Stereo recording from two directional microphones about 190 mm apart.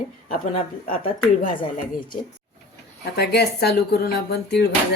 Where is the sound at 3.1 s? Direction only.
60° left (ahead or behind).